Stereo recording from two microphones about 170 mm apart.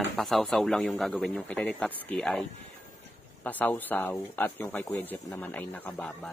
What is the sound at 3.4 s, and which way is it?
Speech, 10° left (ahead or behind).